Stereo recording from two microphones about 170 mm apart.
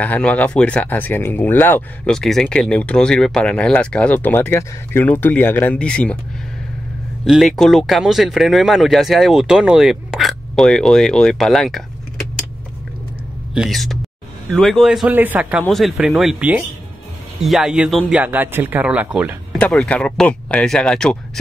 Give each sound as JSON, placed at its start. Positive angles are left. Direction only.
{"t": 0.0, "sound": "speech", "side_deg": 10}
{"t": 7.2, "sound": "speech", "side_deg": 0}
{"t": 13.6, "sound": "speech", "side_deg": 0}
{"t": 15.6, "sound": "speech", "side_deg": 0}
{"t": 19.6, "sound": "speech", "side_deg": 5}